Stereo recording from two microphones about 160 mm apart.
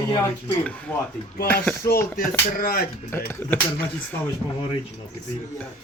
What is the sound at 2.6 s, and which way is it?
Speech, 65° left (ahead or behind).